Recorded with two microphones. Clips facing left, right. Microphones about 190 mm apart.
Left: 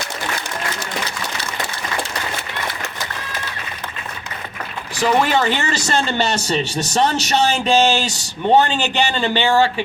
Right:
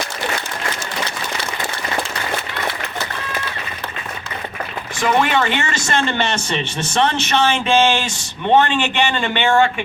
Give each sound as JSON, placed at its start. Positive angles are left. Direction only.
{"t": 4.9, "sound": "speech", "side_deg": 35}